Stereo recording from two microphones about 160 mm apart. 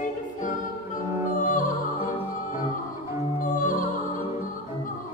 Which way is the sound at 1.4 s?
55° left (ahead or behind).